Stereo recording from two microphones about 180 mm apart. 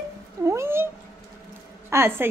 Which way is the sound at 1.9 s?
15° right (ahead or behind).